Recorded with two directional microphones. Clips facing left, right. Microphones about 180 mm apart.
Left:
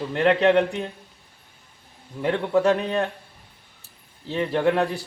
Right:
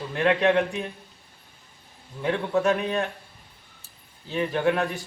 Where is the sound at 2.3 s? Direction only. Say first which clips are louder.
Left 3 dB; 30° left (ahead or behind).